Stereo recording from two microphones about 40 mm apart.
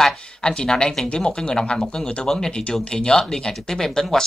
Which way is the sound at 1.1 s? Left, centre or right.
Left.